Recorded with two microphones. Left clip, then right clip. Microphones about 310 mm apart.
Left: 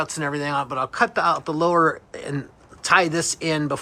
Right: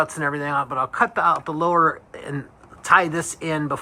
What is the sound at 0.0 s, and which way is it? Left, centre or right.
A man's voice, centre.